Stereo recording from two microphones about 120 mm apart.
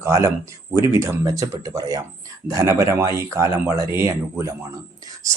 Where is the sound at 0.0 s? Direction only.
25° right (ahead or behind).